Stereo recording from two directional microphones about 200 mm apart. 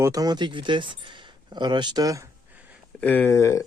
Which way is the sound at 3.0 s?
10° left (ahead or behind).